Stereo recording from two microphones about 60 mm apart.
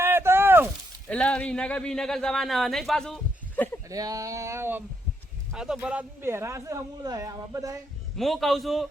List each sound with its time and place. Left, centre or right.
0.0 s a sound: right
1.0 s speech: centre
3.8 s speech: right
5.5 s a man's voice: centre
6.2 s speech: right
8.1 s a man's voice: centre